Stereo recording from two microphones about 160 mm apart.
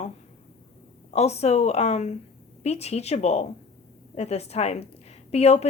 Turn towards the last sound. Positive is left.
turn(degrees=40)  # may be behind; listen again after turning